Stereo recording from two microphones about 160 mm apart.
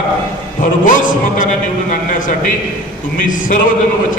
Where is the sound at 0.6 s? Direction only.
55° left (ahead or behind).